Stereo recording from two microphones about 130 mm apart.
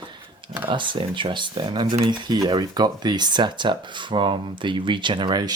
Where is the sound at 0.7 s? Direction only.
40° right (ahead or behind).